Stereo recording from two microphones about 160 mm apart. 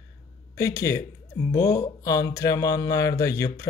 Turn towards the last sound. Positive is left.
turn(degrees=20)  # may be behind; listen again after turning